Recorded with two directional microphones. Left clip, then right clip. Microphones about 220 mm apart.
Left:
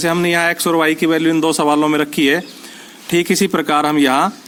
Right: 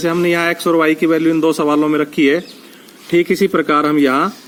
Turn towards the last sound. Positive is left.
turn(degrees=35)  # may be behind; listen again after turning